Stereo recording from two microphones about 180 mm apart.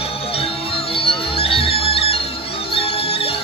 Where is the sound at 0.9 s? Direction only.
30° left (ahead or behind).